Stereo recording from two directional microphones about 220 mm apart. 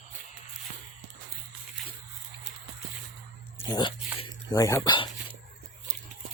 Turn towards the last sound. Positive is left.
turn(degrees=20)  # may be behind; listen again after turning